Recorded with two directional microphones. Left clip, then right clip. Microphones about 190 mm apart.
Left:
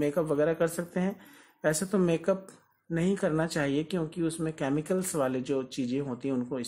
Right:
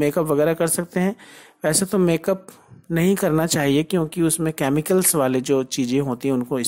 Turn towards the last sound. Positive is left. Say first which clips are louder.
# right 10 dB
turn(degrees=-35)  # may be behind; listen again after turning